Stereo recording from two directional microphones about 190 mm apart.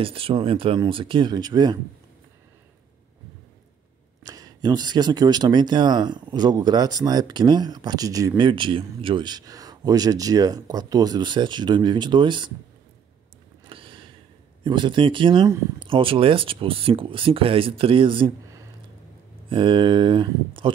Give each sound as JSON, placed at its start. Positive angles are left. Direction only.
{"t": 0.0, "sound": "speech", "side_deg": -30}
{"t": 4.2, "sound": "speech", "side_deg": -20}
{"t": 13.7, "sound": "a sound", "side_deg": -25}
{"t": 14.6, "sound": "speech", "side_deg": -25}
{"t": 19.5, "sound": "speech", "side_deg": -25}